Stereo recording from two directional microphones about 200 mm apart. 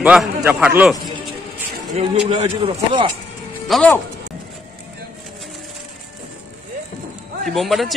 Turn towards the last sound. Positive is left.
turn(degrees=0)  # may be behind; listen again after turning